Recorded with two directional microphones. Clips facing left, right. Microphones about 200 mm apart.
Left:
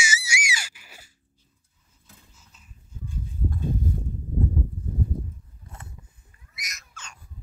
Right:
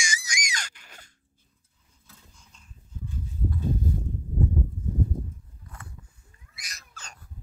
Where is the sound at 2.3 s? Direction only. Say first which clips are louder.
Even; 5° left (ahead or behind).